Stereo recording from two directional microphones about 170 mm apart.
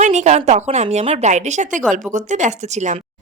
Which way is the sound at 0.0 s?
45° right (ahead or behind).